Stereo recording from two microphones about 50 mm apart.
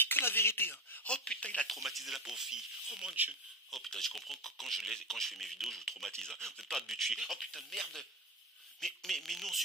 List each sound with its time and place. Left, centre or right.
0.0 s chink: left
1.0 s speech: centre
1.7 s speech: centre
3.7 s speech: centre